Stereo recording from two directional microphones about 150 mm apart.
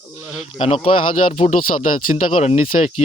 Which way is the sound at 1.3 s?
50° left (ahead or behind).